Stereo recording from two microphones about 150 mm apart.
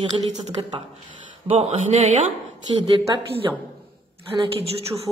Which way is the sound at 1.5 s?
45° right (ahead or behind).